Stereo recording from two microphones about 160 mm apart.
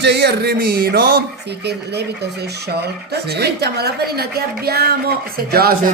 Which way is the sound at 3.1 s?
90° right.